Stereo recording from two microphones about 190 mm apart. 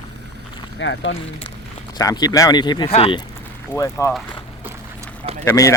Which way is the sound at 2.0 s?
20° left (ahead or behind).